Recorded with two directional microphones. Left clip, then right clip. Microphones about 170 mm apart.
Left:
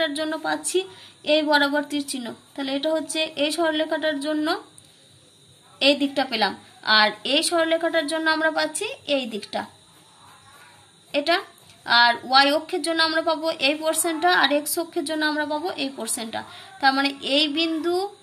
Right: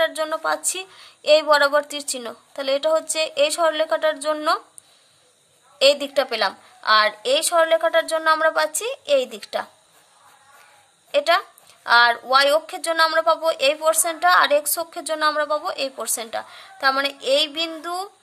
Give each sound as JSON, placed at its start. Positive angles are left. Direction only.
{"t": 0.0, "sound": "a woman's voice", "side_deg": -60}
{"t": 5.8, "sound": "a woman's voice", "side_deg": -60}
{"t": 11.1, "sound": "a woman's voice", "side_deg": -55}